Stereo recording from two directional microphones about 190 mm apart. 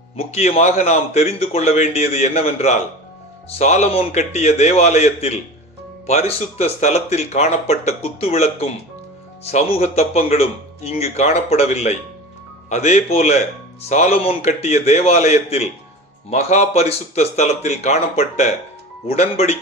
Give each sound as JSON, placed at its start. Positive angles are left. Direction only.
{"t": 0.3, "sound": "speech", "side_deg": 35}